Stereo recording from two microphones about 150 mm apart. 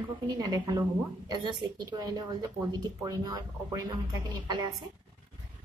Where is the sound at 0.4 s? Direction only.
25° right (ahead or behind).